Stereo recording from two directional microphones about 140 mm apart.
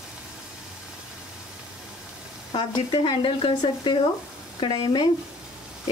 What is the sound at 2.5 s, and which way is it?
Speech, 35° left (ahead or behind).